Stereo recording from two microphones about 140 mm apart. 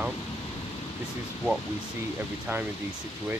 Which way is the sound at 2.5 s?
20° right (ahead or behind).